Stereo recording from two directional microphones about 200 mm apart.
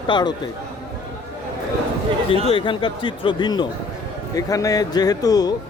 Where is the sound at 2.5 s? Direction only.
25° left (ahead or behind).